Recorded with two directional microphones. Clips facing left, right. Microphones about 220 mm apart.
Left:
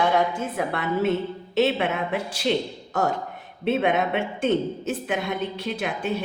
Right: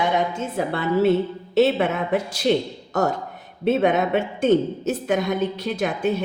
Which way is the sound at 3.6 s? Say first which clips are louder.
Right 3 dB; 40° right (ahead or behind).